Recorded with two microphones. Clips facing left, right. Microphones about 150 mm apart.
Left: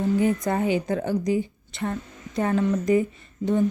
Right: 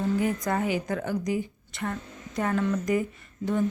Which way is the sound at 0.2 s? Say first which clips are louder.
Left 4 dB; 25° left (ahead or behind).